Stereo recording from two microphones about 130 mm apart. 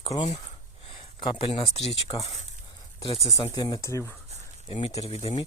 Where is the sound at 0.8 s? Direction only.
50° left (ahead or behind).